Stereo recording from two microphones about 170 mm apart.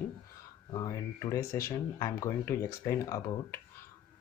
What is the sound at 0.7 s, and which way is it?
Speech, 20° left (ahead or behind).